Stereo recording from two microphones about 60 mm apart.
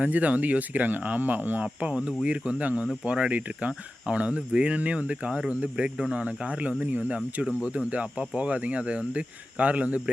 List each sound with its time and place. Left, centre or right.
0.0 s speech: right
1.6 s cricket: centre
2.2 s speech: centre